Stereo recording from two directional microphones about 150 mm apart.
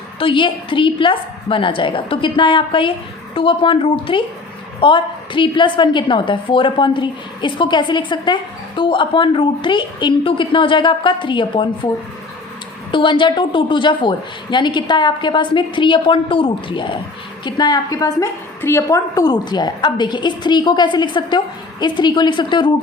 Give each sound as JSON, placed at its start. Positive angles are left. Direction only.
{"t": 0.2, "sound": "a woman's voice", "side_deg": 35}
{"t": 12.9, "sound": "a woman's voice", "side_deg": 35}